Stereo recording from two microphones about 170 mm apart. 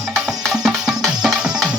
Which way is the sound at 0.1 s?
Centre (ahead or behind).